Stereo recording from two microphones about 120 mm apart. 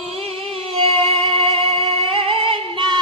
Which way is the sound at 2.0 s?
50° right (ahead or behind).